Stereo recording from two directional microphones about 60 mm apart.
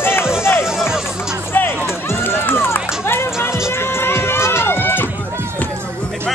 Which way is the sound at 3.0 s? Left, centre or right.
Left.